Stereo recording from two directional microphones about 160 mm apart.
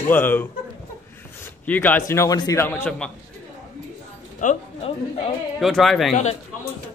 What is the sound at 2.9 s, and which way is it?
Speech, 5° left (ahead or behind).